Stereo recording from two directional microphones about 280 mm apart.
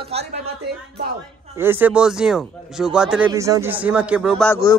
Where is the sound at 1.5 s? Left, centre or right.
Centre.